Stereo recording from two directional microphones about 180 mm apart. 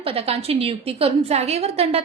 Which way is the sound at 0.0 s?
30° right (ahead or behind).